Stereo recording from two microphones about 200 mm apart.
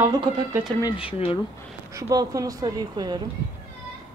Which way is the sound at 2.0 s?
15° right (ahead or behind).